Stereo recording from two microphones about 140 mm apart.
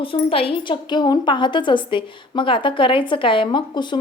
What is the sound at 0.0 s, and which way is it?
A woman's voice, 40° left (ahead or behind).